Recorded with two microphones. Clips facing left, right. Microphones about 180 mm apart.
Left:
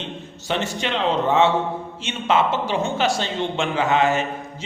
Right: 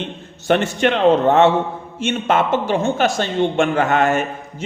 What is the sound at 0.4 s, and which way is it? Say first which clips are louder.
A man's voice: right 8 dB; 55° right (ahead or behind).